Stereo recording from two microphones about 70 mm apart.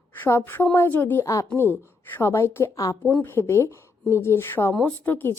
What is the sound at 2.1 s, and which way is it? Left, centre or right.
Speech, left.